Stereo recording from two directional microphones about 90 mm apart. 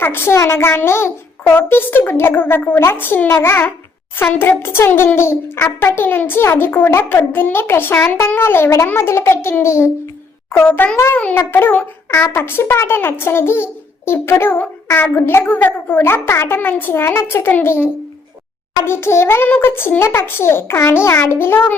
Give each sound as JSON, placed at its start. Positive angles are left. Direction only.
{"t": 0.0, "sound": "a child's voice", "side_deg": 25}
{"t": 10.9, "sound": "a child's voice", "side_deg": 30}
{"t": 18.9, "sound": "a child's voice", "side_deg": 30}